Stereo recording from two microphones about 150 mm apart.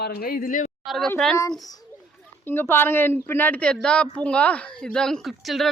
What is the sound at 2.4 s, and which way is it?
A woman's voice, 15° left (ahead or behind).